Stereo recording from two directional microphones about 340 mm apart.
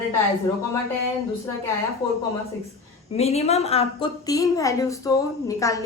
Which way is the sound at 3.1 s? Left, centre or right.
Centre.